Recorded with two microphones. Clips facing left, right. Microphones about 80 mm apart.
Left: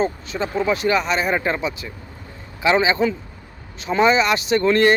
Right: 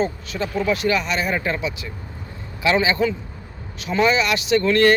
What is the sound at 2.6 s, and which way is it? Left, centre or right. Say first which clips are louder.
Speech: left 1 dB; left.